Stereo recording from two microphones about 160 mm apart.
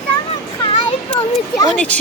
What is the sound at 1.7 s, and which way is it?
Speech, 10° left (ahead or behind).